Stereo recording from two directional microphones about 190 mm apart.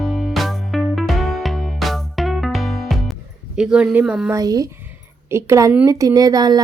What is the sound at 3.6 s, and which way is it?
Speech, 5° right (ahead or behind).